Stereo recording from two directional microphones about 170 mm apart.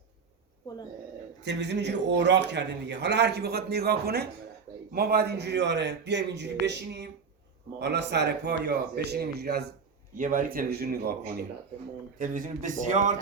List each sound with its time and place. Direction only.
1.5 s a man's voice: 90° right; by 9.6 s 75° right (ahead or behind)
10.2 s speech: 50° right (ahead or behind); by 11.4 s 70° right (ahead or behind)
12.2 s speech: 50° right (ahead or behind)